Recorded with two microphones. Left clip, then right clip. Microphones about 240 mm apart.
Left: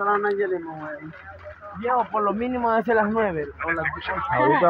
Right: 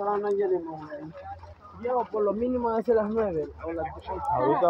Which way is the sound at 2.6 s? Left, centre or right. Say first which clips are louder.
Left 6 dB; left.